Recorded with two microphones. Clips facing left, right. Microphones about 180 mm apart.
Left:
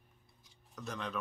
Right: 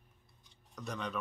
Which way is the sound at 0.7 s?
Centre (ahead or behind).